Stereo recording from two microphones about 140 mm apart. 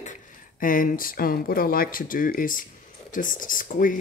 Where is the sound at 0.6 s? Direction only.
80° left.